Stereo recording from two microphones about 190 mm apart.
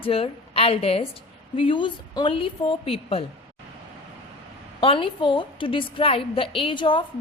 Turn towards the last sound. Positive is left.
turn(degrees=25)  # may be behind; listen again after turning